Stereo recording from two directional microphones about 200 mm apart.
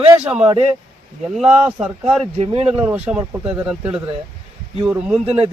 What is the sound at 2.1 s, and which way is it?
Speech, 30° right (ahead or behind).